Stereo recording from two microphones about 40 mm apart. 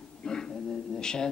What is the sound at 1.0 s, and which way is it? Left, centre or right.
Mantra, centre.